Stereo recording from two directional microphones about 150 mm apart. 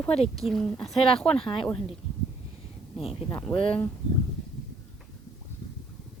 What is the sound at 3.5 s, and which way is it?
Speech, 35° left (ahead or behind).